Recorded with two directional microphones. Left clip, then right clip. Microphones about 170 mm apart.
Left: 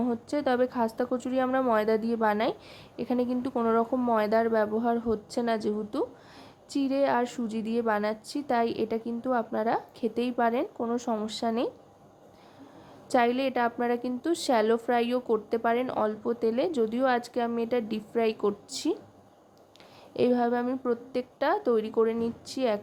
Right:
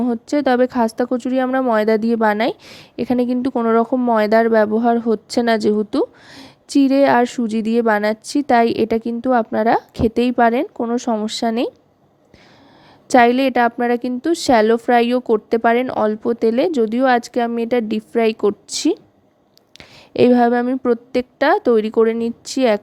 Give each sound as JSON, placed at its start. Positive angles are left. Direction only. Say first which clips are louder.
{"t": 0.1, "sound": "a woman's voice", "louder": "right 13 dB", "side_deg": -40}
{"t": 10.8, "sound": "a woman's voice", "louder": "right 10 dB", "side_deg": -35}
{"t": 13.1, "sound": "a woman's voice", "louder": "right 12 dB", "side_deg": -45}
{"t": 20.1, "sound": "a woman's voice", "louder": "right 12 dB", "side_deg": -45}